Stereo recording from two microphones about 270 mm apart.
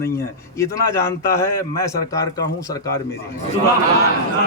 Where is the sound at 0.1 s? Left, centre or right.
Centre.